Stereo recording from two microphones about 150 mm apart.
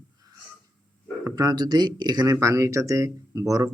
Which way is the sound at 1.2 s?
25° right (ahead or behind).